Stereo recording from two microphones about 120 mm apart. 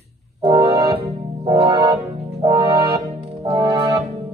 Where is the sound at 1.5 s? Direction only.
50° right (ahead or behind).